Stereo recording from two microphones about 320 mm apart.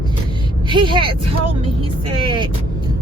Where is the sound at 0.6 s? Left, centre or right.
Centre.